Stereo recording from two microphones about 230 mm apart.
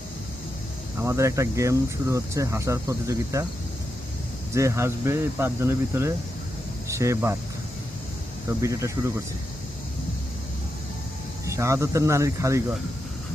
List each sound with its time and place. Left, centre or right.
1.0 s speech: centre
4.5 s speech: centre
8.4 s speech: centre
11.4 s speech: centre